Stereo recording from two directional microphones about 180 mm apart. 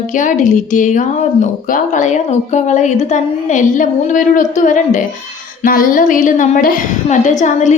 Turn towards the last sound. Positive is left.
turn(degrees=40)  # may be behind; listen again after turning